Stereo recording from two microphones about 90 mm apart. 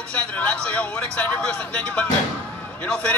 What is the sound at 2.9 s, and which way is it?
Speech, 10° left (ahead or behind).